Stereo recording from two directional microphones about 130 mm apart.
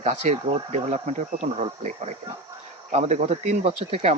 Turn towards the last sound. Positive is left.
turn(degrees=-50)  # may be behind; listen again after turning